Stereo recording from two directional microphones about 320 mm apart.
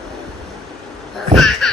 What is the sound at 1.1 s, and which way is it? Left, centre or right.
Babbling, centre.